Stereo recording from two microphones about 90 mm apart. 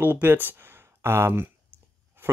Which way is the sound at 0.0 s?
20° right (ahead or behind).